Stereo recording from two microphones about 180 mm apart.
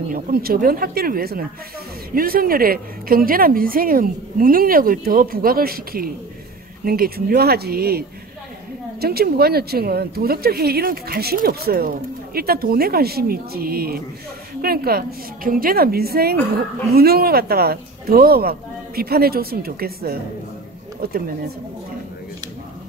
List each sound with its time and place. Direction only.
0.1 s a woman's voice: 55° right (ahead or behind)
9.0 s a woman's voice: 60° right (ahead or behind)